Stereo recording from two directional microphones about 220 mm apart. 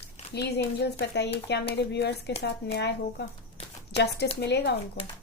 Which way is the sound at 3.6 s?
30° left (ahead or behind).